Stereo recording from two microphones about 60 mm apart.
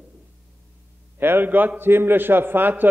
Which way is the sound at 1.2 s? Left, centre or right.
Right.